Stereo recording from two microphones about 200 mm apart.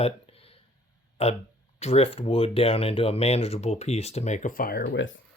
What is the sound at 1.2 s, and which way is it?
Speech, 30° left (ahead or behind).